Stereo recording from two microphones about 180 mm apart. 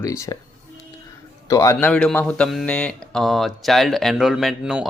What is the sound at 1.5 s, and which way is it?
Speech, 20° left (ahead or behind).